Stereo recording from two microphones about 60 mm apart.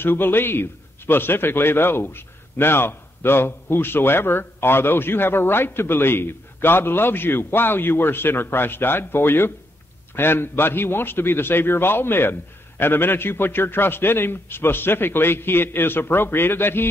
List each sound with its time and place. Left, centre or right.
0.0 s a man's voice: left